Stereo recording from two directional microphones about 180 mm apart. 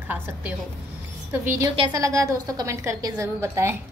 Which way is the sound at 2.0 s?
15° right (ahead or behind).